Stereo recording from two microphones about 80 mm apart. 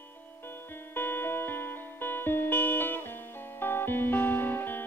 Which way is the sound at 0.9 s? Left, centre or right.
Left.